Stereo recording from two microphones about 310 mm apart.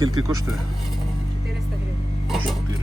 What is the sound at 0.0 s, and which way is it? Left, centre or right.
Speech, right.